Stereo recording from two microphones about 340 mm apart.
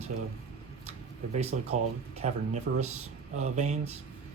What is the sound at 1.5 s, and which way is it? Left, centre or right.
Speech, right.